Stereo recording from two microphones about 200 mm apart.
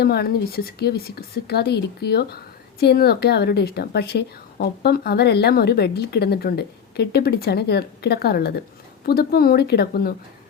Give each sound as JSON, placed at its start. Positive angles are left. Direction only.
{"t": 0.0, "sound": "speech", "side_deg": 50}